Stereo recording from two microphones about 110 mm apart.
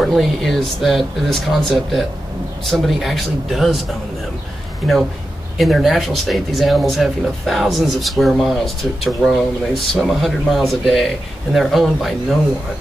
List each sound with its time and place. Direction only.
0.0 s speech: centre (ahead or behind)
4.8 s speech: centre (ahead or behind)